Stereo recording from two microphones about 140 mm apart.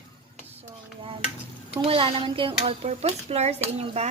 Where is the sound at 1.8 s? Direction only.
40° right (ahead or behind).